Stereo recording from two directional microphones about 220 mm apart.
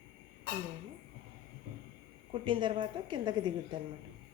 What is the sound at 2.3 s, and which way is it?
A woman's voice, 25° right (ahead or behind).